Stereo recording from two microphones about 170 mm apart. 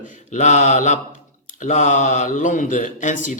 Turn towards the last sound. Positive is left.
turn(degrees=50)  # may be behind; listen again after turning